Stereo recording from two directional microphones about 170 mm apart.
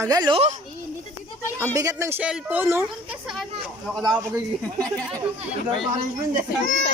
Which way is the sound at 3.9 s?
Centre (ahead or behind).